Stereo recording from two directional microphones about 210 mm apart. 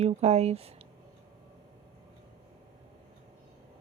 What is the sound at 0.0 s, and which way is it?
Speech, 30° right (ahead or behind).